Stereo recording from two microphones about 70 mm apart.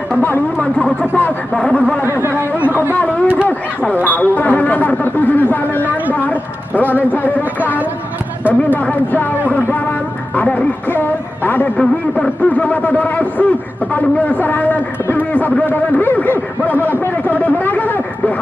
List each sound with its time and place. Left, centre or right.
0.2 s speech: left
1.5 s speech: centre
1.8 s speech: left
2.5 s chatter: left
3.8 s a sound: left
7.1 s speech: left
8.6 s speech: left
10.3 s a sound: left
12.4 s a man's voice: left
15.1 s a sound: left
15.6 s speech: left
17.0 s a sound: left